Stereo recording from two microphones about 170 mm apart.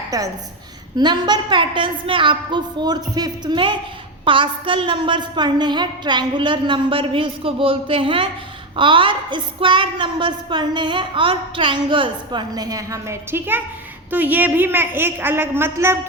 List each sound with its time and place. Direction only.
0.1 s a woman's voice: 20° right (ahead or behind)